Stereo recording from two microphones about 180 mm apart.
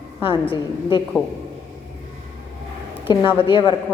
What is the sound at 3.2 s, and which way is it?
Speech, 30° left (ahead or behind).